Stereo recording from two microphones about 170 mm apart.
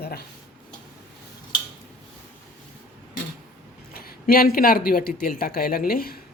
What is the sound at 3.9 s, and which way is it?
Speech, 60° left (ahead or behind).